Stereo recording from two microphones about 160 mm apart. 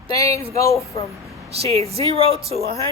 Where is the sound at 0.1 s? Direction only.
20° left (ahead or behind).